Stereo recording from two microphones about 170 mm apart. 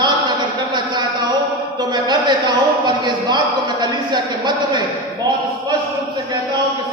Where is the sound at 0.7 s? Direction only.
25° right (ahead or behind).